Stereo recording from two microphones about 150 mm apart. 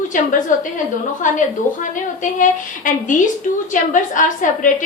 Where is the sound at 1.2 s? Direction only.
60° left (ahead or behind).